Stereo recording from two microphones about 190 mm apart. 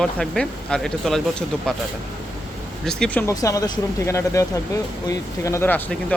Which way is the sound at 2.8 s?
5° left (ahead or behind).